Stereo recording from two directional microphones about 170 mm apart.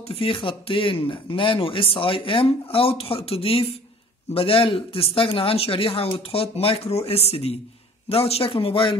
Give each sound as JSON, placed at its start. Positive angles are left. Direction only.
{"t": 0.0, "sound": "speech", "side_deg": 35}